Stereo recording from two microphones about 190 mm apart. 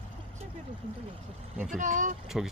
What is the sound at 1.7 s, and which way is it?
Speech, 40° right (ahead or behind).